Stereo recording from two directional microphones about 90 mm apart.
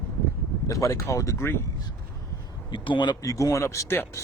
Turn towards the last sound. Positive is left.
turn(degrees=30)  # may be behind; listen again after turning